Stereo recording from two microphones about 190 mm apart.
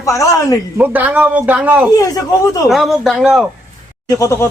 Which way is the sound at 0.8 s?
10° right (ahead or behind).